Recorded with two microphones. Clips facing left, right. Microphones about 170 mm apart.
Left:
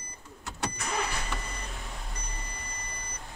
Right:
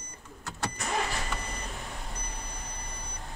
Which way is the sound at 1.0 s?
Centre (ahead or behind).